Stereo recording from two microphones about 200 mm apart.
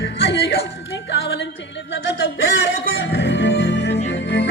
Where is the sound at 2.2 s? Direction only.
70° left (ahead or behind).